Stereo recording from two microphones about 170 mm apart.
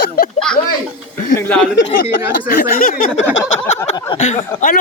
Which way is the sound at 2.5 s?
60° left (ahead or behind).